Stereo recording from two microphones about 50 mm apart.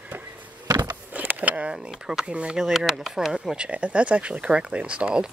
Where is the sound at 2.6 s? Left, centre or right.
Centre.